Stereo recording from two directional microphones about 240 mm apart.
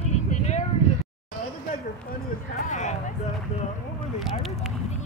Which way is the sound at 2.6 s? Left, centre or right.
Left.